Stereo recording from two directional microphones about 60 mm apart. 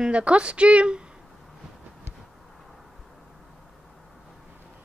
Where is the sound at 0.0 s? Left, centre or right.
Centre.